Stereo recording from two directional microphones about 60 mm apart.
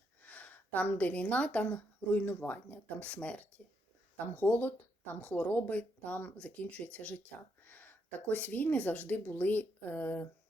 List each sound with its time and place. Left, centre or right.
0.2 s speech: left